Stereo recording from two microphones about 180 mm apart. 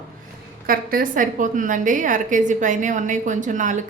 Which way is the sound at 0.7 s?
55° right (ahead or behind).